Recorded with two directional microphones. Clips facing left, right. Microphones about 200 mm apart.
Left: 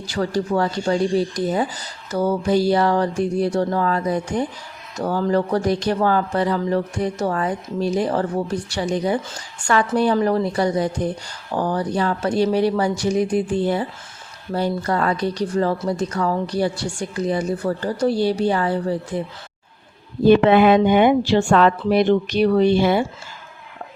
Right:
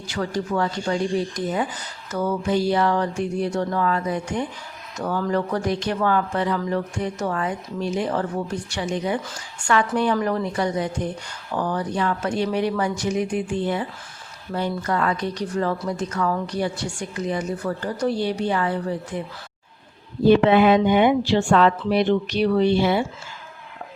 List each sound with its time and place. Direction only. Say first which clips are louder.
0.1 s speech: left 4 dB; 35° left (ahead or behind)
20.2 s speech: left 2 dB; 55° left (ahead or behind)